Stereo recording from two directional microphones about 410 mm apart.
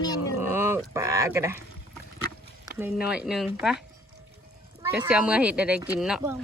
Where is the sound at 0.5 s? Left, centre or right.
Centre.